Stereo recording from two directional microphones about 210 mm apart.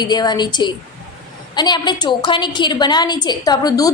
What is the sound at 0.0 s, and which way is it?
A woman's voice, 20° left (ahead or behind).